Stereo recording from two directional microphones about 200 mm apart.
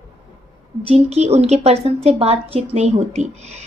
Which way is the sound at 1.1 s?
30° right (ahead or behind).